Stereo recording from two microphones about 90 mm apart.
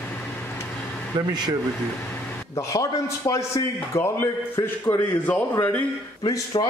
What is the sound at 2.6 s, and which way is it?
A man's voice, 35° left (ahead or behind).